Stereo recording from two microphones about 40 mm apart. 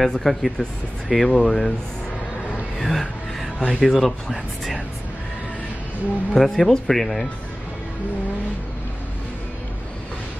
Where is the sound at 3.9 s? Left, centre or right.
Centre.